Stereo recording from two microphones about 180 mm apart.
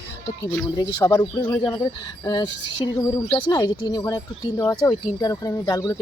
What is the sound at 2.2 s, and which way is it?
Speech, 25° left (ahead or behind).